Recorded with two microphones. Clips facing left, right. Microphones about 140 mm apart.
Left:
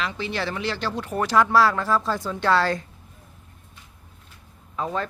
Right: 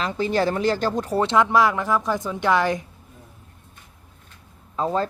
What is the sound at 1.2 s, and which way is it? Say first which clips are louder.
A woman's voice: even; 20° right (ahead or behind).